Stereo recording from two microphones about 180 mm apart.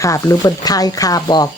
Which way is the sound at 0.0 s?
20° left (ahead or behind).